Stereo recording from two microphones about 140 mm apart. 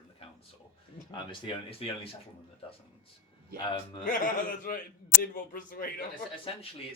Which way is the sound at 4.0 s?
35° left (ahead or behind).